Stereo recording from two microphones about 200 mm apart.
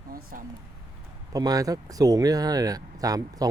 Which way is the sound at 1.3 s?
20° right (ahead or behind).